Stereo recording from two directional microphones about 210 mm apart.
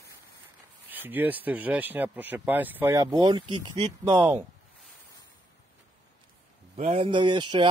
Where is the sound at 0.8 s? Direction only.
10° right (ahead or behind).